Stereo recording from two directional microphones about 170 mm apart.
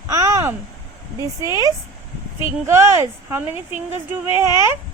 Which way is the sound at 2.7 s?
15° right (ahead or behind).